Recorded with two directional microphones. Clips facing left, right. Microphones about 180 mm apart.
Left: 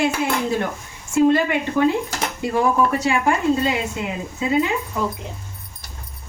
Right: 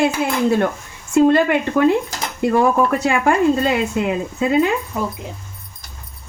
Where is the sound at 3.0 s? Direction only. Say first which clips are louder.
Right 4 dB; 55° right (ahead or behind).